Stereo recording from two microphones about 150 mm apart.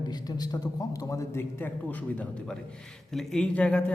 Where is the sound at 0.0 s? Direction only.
25° left (ahead or behind).